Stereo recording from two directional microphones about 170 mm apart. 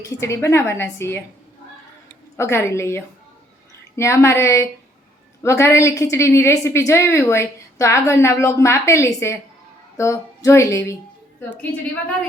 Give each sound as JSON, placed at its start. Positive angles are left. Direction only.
{"t": 0.0, "sound": "a woman's voice", "side_deg": 15}
{"t": 2.3, "sound": "a woman's voice", "side_deg": 15}